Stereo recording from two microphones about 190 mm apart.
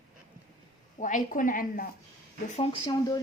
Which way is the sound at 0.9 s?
40° left (ahead or behind).